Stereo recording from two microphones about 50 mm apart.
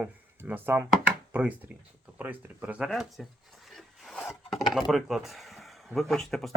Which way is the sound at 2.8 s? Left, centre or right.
Centre.